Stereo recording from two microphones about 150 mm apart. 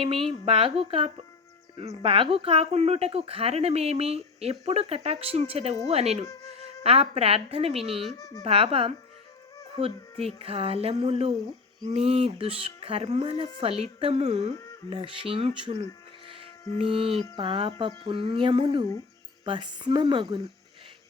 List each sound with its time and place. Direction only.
0.4 s a woman's voice: 40° right (ahead or behind)